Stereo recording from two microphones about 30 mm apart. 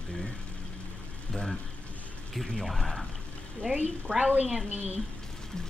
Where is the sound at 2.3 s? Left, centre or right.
Centre.